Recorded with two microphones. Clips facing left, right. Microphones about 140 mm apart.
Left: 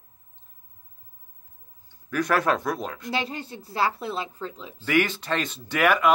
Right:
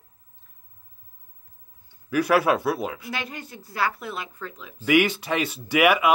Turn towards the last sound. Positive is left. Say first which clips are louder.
# right 2 dB
turn(degrees=-10)  # may be behind; listen again after turning